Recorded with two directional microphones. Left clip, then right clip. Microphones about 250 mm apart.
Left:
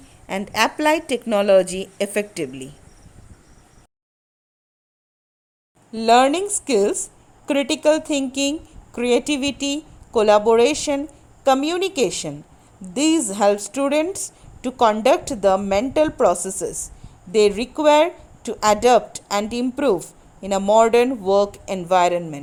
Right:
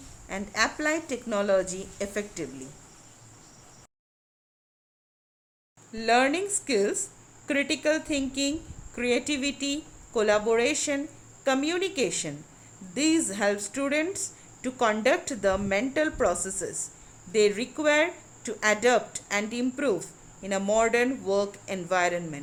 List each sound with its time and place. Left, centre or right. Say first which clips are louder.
0.3 s a woman's voice: left 7 dB; left
5.9 s a woman's voice: left 8 dB; left